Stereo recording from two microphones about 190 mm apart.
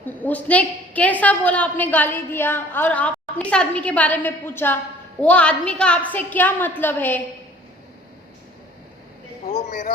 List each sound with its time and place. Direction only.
0.0 s a woman's voice: 10° left (ahead or behind)
9.5 s speech: 40° left (ahead or behind)